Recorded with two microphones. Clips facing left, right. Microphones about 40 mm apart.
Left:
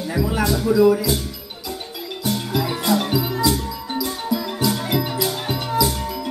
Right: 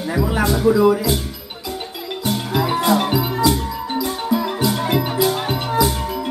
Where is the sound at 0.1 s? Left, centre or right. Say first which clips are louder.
Right 2 dB; right.